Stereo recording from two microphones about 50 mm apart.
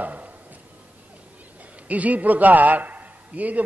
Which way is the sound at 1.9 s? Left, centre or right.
Right.